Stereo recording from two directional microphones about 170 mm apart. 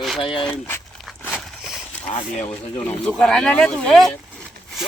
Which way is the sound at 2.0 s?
30° left (ahead or behind).